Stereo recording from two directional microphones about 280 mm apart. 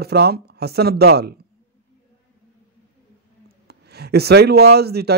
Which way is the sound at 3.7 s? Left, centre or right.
Right.